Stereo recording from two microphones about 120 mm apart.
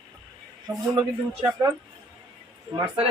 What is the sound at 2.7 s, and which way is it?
Speech, 50° right (ahead or behind).